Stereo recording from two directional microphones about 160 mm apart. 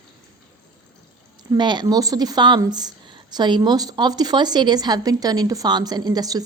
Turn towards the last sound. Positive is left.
turn(degrees=-25)  # may be behind; listen again after turning